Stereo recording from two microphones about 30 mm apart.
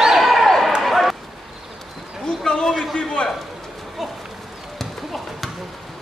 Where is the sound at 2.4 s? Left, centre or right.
Centre.